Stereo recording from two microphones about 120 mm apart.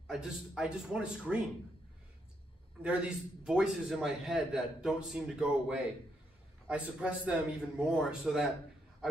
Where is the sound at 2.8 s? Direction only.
5° right (ahead or behind).